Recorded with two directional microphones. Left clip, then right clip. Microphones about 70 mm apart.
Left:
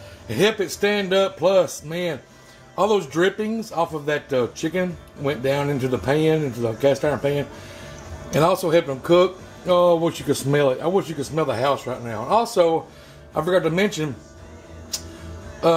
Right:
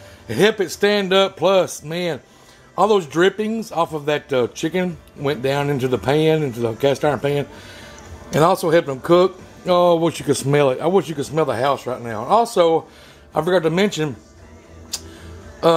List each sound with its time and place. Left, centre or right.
0.3 s speech: right